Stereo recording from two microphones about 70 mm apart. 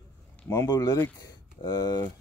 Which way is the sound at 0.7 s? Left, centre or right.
Left.